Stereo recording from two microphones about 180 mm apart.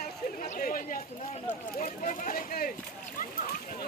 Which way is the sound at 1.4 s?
50° left (ahead or behind).